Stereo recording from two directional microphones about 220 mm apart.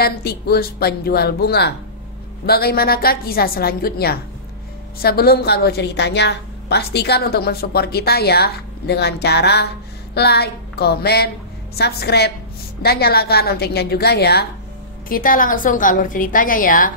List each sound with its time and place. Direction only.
0.0 s a woman's voice: 45° left (ahead or behind)